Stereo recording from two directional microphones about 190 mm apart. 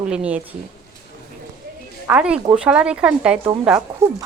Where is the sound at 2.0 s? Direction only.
5° right (ahead or behind).